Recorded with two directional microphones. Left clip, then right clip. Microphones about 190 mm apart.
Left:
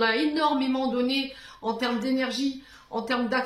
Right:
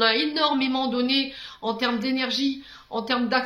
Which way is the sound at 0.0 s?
30° right (ahead or behind).